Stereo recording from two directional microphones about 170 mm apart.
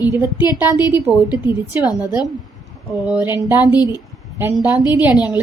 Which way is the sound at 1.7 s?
10° right (ahead or behind).